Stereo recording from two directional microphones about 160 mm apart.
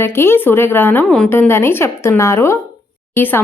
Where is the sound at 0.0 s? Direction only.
15° left (ahead or behind).